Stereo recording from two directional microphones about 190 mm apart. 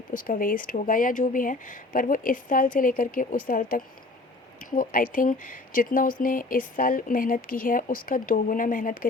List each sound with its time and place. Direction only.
0.1 s speech: 45° left (ahead or behind)